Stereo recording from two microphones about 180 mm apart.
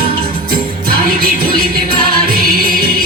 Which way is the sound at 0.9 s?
55° right (ahead or behind).